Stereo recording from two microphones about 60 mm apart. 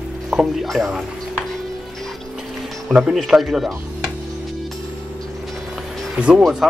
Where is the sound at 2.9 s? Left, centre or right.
Centre.